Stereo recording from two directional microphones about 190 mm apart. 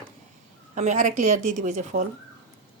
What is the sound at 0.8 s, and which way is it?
Cutlery, 40° right (ahead or behind).